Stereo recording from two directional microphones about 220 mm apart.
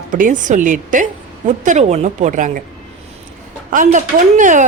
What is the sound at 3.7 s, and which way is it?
Speech, 35° right (ahead or behind).